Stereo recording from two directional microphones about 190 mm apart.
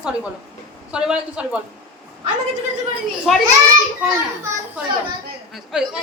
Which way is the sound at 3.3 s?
Centre (ahead or behind).